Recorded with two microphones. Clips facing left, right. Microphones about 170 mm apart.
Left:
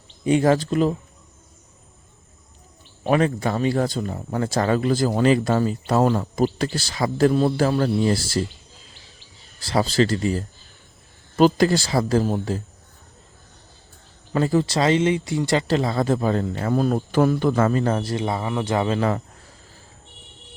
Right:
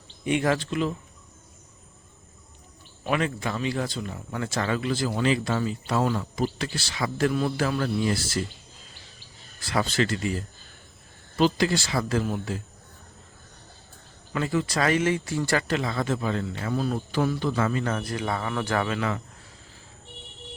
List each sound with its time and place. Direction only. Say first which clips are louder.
0.3 s speech: left 6 dB; 35° left (ahead or behind)
3.0 s speech: left 7 dB; 40° left (ahead or behind)
9.6 s speech: left 5 dB; 35° left (ahead or behind)
11.3 s speech: left 6 dB; 45° left (ahead or behind)
14.3 s speech: left 6 dB; 35° left (ahead or behind)
18.9 s speech: left 6 dB; 35° left (ahead or behind)